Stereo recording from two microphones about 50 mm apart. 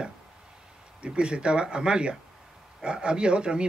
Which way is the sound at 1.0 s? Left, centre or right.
Right.